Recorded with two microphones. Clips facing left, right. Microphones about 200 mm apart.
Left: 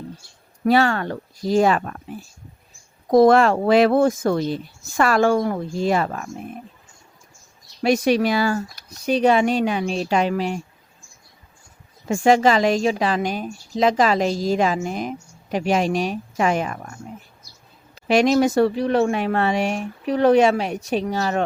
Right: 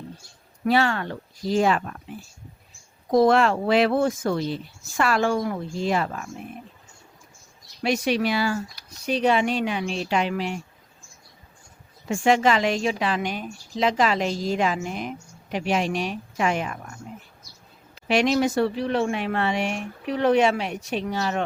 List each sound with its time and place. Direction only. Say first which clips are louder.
0.6 s speech: left 4 dB; 40° left (ahead or behind)
3.1 s speech: left 4 dB; 50° left (ahead or behind)
7.8 s speech: left 5 dB; 45° left (ahead or behind)
12.0 s a woman's voice: left 4 dB; 40° left (ahead or behind)
17.9 s a woman's voice: left 4 dB; 40° left (ahead or behind)